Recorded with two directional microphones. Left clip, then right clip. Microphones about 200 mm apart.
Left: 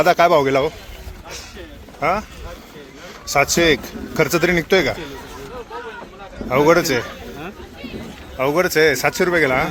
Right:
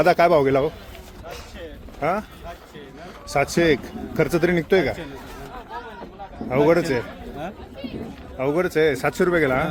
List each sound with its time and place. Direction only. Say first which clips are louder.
0.0 s speech: left 3 dB; 15° right (ahead or behind)
2.0 s speech: left 4 dB; 15° right (ahead or behind)
3.2 s speech: left 4 dB; 10° right (ahead or behind)
6.5 s a man's voice: left 4 dB; 5° right (ahead or behind)
8.4 s speech: left 4 dB; 5° right (ahead or behind)